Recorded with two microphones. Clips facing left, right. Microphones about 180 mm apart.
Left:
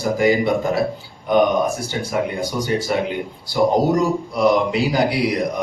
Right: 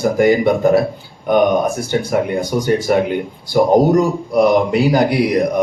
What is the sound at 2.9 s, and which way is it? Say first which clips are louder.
Speech: right 6 dB; 50° right (ahead or behind).